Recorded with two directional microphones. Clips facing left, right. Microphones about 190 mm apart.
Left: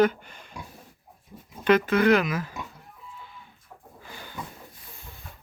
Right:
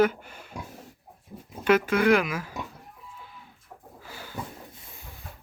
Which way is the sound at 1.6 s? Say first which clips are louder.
Left 1 dB; 10° right (ahead or behind).